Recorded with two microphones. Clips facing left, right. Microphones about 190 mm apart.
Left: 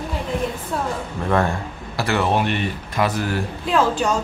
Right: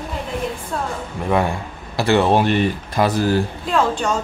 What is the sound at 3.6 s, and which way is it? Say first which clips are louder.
Speech: even; 5° left (ahead or behind).